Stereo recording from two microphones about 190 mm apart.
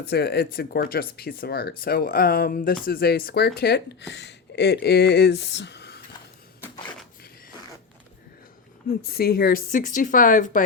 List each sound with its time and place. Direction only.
0.1 s speech: 55° left (ahead or behind)
8.9 s speech: 55° left (ahead or behind)